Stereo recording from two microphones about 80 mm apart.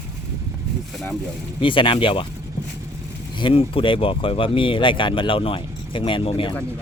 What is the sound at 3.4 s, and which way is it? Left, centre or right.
Speech, left.